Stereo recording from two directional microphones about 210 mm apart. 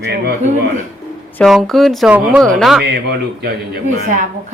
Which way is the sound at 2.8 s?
50° right (ahead or behind).